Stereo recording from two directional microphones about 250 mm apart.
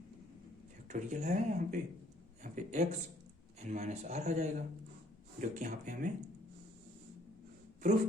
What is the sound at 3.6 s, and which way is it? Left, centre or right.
Speech, right.